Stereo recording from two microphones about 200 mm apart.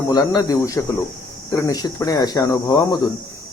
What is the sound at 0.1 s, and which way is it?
Speech, 20° left (ahead or behind).